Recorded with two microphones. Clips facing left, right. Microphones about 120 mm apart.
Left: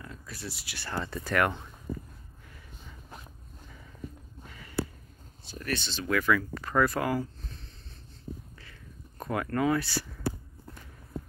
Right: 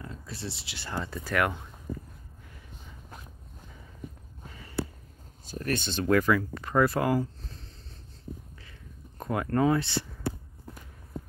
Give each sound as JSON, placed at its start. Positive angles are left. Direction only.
{"t": 0.0, "sound": "speech", "side_deg": -30}
{"t": 0.9, "sound": "speech", "side_deg": -5}
{"t": 4.5, "sound": "a sound", "side_deg": -30}
{"t": 5.5, "sound": "speech", "side_deg": -45}
{"t": 6.2, "sound": "speech", "side_deg": -20}
{"t": 9.2, "sound": "speech", "side_deg": -20}